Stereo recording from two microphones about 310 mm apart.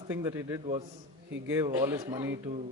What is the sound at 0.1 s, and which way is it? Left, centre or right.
A man's voice, centre.